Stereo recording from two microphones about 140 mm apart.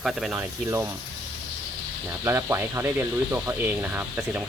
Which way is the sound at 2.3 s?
20° right (ahead or behind).